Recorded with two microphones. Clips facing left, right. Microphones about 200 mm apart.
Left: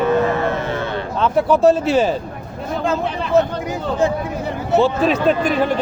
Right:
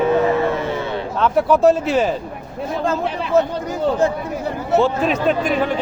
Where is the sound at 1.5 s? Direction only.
30° left (ahead or behind).